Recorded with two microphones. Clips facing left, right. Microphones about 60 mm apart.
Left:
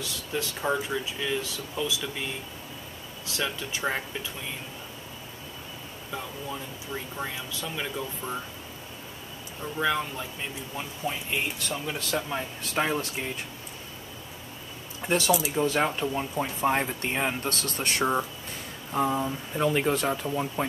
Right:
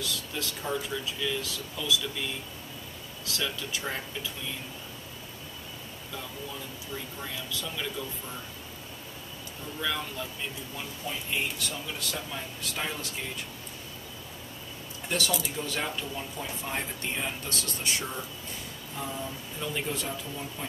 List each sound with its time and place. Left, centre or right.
0.0 s speech: left
3.3 s speech: left
7.2 s speech: left
9.8 s speech: left
11.0 s speech: left
15.0 s speech: left
18.9 s speech: left
19.5 s speech: left